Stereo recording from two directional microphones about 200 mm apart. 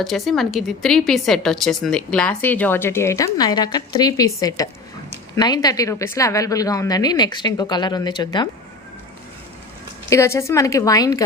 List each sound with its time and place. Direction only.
0.0 s a woman's voice: centre (ahead or behind); by 8.4 s 20° left (ahead or behind)
10.1 s speech: 15° left (ahead or behind)